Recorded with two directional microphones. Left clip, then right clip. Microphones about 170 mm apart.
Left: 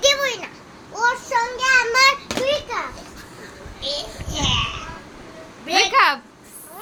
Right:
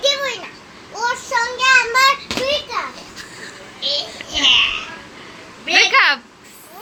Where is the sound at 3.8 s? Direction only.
30° left (ahead or behind).